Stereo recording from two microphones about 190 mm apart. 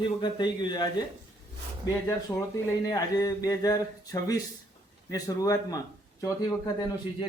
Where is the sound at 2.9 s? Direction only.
20° left (ahead or behind).